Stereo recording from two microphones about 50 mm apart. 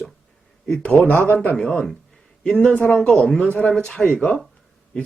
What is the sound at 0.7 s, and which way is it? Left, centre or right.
Speech, centre.